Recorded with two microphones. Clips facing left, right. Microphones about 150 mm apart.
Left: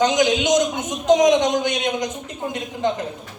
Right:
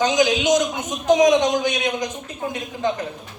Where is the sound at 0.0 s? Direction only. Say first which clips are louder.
Left 1 dB; 20° left (ahead or behind).